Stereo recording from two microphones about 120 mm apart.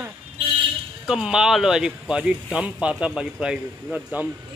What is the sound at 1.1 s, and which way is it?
Speech, 5° right (ahead or behind).